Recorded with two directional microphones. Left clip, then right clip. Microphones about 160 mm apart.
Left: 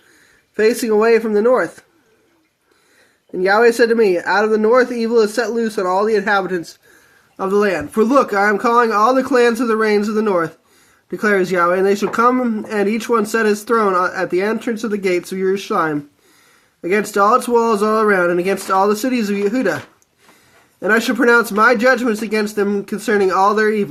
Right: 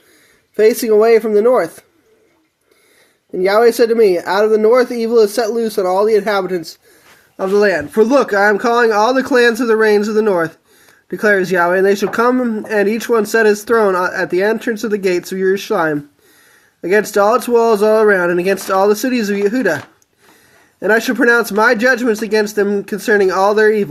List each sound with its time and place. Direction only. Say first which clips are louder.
0.5 s speech: right 4 dB; 25° right (ahead or behind)
3.4 s speech: right 1 dB; 25° right (ahead or behind)
20.8 s speech: right 2 dB; 25° right (ahead or behind)